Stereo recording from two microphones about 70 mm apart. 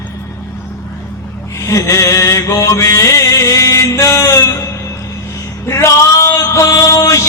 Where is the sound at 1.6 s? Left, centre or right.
Left.